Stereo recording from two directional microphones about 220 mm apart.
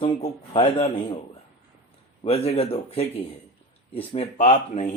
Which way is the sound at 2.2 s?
30° left (ahead or behind).